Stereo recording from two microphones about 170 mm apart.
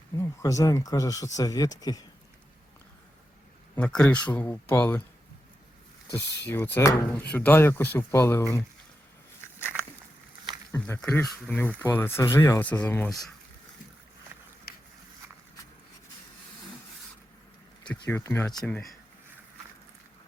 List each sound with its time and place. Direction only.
0.2 s speech: 20° left (ahead or behind)
3.8 s speech: 5° left (ahead or behind)
6.1 s speech: 15° left (ahead or behind)
10.7 s speech: 10° left (ahead or behind)
17.8 s speech: 10° left (ahead or behind)